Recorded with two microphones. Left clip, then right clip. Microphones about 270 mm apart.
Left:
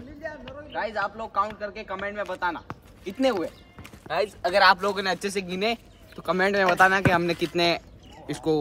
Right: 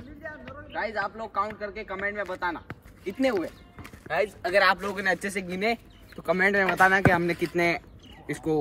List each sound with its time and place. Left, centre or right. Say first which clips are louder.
0.2 s music: left 4 dB; left
0.7 s speech: left 1 dB; centre